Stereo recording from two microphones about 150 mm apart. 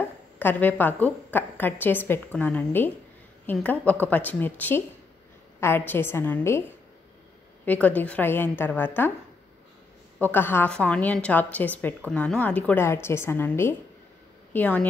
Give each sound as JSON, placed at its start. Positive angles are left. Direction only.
{"t": 0.0, "sound": "a woman's voice", "side_deg": 15}
{"t": 7.6, "sound": "a woman's voice", "side_deg": 10}
{"t": 10.2, "sound": "a woman's voice", "side_deg": 15}